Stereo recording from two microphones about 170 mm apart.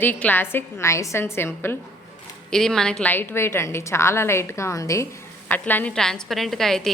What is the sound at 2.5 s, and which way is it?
A woman's voice, 5° left (ahead or behind).